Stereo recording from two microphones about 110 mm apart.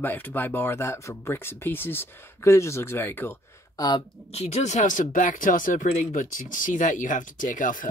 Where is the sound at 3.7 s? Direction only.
40° left (ahead or behind).